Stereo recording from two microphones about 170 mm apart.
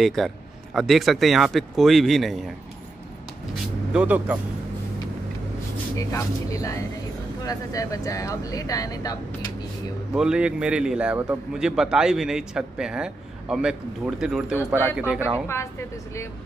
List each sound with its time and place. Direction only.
0.0 s a man's voice: centre (ahead or behind)
3.9 s speech: 5° right (ahead or behind)
5.9 s speech: 20° left (ahead or behind)
10.1 s a man's voice: 5° right (ahead or behind)
15.4 s a woman's voice: 15° left (ahead or behind)